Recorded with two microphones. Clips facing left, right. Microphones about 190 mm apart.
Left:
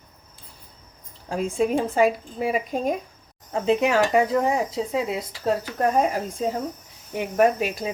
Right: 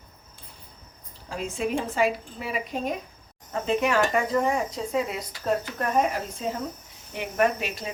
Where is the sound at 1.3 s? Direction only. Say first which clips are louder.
Left 5 dB; 40° left (ahead or behind).